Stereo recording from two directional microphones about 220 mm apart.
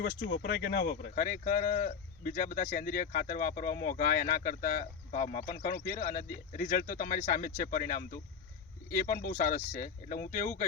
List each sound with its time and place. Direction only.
0.0 s speech: 45° left (ahead or behind)